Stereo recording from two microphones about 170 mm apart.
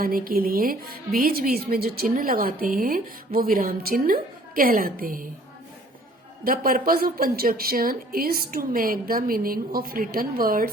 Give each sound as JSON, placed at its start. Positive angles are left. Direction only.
{"t": 0.0, "sound": "a woman's voice", "side_deg": -60}
{"t": 6.4, "sound": "a woman's voice", "side_deg": -60}